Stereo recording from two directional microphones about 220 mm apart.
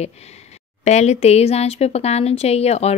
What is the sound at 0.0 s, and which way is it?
A woman's voice, 30° left (ahead or behind).